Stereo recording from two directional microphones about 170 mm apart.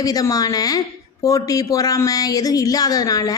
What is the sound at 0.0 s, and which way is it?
Speech, 20° left (ahead or behind).